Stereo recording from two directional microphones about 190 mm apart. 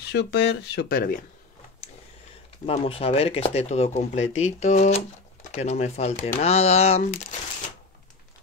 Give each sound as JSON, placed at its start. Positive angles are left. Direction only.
{"t": 0.0, "sound": "speech", "side_deg": 60}
{"t": 2.6, "sound": "speech", "side_deg": 30}